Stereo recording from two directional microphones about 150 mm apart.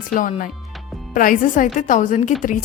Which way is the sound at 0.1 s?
60° left (ahead or behind).